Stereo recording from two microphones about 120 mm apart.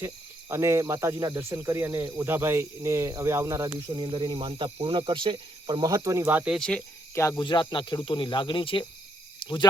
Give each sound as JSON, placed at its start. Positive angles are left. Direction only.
{"t": 0.0, "sound": "speech", "side_deg": -20}
{"t": 4.0, "sound": "speech", "side_deg": -40}
{"t": 6.6, "sound": "speech", "side_deg": 5}
{"t": 7.1, "sound": "speech", "side_deg": 25}
{"t": 7.3, "sound": "speech", "side_deg": 40}